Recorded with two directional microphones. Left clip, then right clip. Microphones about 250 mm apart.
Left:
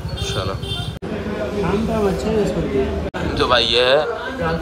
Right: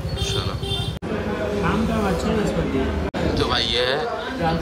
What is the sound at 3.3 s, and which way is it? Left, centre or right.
Speech, centre.